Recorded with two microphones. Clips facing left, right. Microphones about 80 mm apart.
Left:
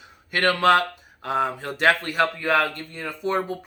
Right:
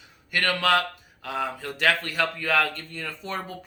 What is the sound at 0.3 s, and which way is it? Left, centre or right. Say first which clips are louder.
Speech: left 5 dB; left.